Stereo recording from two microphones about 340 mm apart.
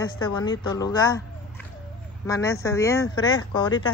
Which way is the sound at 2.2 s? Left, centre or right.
Centre.